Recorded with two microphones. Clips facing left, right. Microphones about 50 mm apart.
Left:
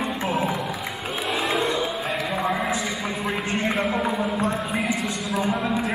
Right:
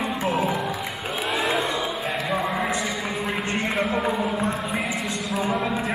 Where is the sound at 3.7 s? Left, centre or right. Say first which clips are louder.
Even; centre.